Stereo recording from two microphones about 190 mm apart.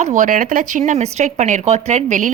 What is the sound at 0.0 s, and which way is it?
Speech, 45° right (ahead or behind).